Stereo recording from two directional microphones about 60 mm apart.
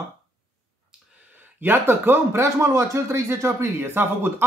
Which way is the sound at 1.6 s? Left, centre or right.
Right.